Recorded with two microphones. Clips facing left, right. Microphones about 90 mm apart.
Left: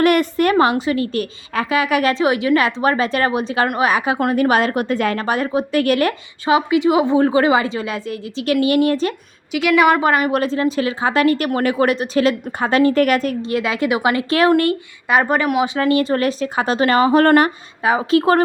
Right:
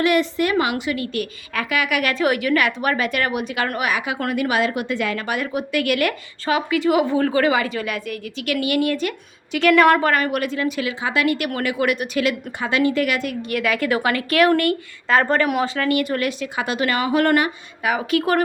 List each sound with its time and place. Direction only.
0.0 s a woman's voice: 50° left (ahead or behind); by 6.1 s 35° left (ahead or behind)
6.4 s a woman's voice: 20° left (ahead or behind)
9.5 s a woman's voice: 5° left (ahead or behind)
10.0 s a woman's voice: 20° left (ahead or behind)
10.3 s a woman's voice: 30° left (ahead or behind)
13.4 s a woman's voice: 25° left (ahead or behind)
15.0 s a woman's voice: 10° left (ahead or behind)
15.6 s a woman's voice: 25° left (ahead or behind); by 17.5 s 40° left (ahead or behind)
17.8 s a woman's voice: 30° left (ahead or behind)